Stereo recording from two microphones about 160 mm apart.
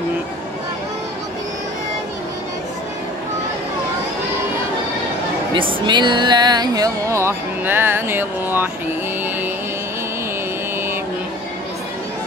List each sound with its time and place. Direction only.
5.5 s speech: 30° right (ahead or behind); by 8.6 s 15° right (ahead or behind)